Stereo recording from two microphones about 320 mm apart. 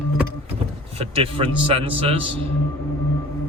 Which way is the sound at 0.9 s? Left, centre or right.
Centre.